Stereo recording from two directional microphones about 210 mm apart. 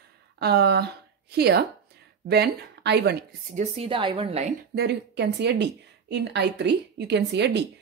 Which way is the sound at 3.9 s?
25° right (ahead or behind).